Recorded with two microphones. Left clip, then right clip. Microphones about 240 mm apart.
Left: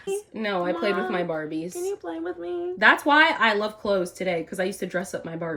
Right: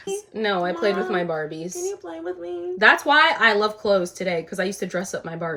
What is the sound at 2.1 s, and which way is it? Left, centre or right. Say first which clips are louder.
Speech: right 1 dB; centre.